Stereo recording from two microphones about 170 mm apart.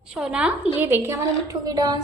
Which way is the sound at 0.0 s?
5° right (ahead or behind).